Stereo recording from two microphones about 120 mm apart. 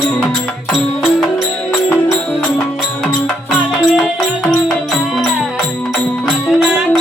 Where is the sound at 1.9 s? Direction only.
20° left (ahead or behind).